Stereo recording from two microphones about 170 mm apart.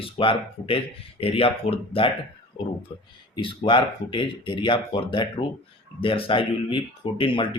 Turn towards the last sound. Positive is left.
turn(degrees=30)  # may be behind; listen again after turning